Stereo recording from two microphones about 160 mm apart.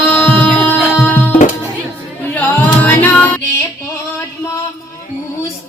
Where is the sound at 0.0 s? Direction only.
10° left (ahead or behind).